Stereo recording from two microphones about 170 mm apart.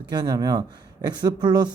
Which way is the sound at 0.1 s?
25° right (ahead or behind).